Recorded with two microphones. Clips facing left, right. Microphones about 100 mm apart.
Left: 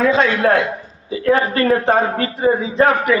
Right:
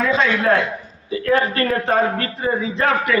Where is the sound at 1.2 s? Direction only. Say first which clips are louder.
Left 3 dB; 25° left (ahead or behind).